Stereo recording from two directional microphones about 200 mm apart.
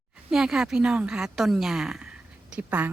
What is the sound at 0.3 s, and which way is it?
Speech, centre (ahead or behind).